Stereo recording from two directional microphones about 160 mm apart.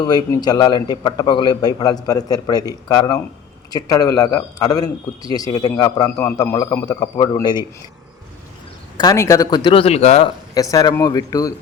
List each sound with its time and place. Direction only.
0.0 s a man's voice: 25° left (ahead or behind)
9.0 s a man's voice: 20° left (ahead or behind); by 10.2 s 40° left (ahead or behind)
10.5 s a man's voice: 20° left (ahead or behind)